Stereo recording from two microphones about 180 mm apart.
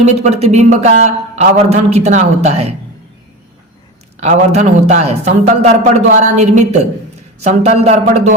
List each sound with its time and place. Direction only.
0.0 s a man's voice: 40° right (ahead or behind)
4.2 s a man's voice: 40° right (ahead or behind)